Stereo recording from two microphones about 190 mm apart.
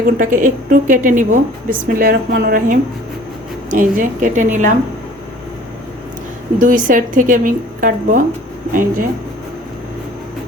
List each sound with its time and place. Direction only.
0.2 s a woman's voice: 45° right (ahead or behind)
6.6 s a woman's voice: 45° right (ahead or behind)